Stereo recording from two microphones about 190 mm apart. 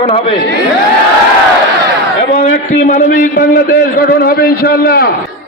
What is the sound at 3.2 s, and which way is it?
A man's voice, 50° left (ahead or behind).